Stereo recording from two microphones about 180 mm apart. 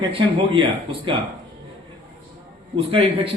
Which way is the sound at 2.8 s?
30° right (ahead or behind).